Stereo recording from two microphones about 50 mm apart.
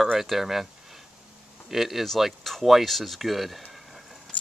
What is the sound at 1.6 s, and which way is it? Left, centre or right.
Speech, centre.